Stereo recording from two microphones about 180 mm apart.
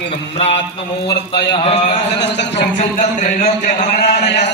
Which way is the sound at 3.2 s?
40° left (ahead or behind).